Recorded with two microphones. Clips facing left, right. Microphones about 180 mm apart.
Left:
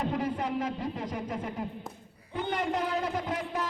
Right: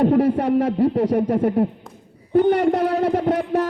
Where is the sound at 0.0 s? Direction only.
65° right (ahead or behind).